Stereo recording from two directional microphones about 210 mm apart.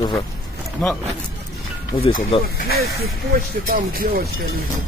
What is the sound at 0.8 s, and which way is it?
Speech, 5° left (ahead or behind).